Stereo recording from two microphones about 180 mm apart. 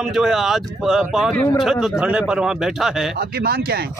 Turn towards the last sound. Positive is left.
turn(degrees=-60)  # may be behind; listen again after turning